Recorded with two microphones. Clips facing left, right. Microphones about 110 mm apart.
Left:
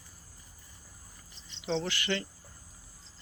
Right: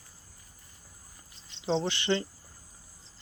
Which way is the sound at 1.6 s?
30° right (ahead or behind).